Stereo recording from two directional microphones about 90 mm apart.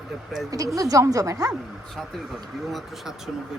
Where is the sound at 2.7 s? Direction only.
Centre (ahead or behind).